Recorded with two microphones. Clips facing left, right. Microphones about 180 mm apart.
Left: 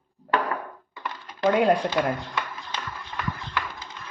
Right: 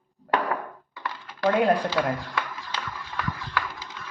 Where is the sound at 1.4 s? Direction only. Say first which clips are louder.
Left 1 dB; 15° left (ahead or behind).